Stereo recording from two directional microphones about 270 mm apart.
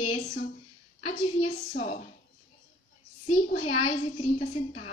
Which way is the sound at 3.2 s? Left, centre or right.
Left.